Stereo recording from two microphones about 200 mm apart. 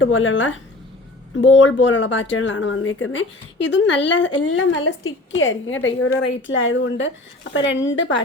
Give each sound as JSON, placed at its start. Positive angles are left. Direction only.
{"t": 0.0, "sound": "speech", "side_deg": 75}
{"t": 5.4, "sound": "speech", "side_deg": 75}